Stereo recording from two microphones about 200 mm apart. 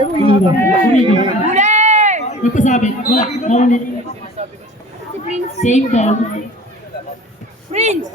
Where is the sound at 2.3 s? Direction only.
35° left (ahead or behind).